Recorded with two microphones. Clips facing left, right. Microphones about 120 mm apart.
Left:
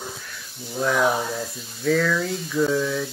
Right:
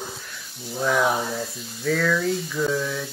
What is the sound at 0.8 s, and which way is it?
Speech, centre (ahead or behind).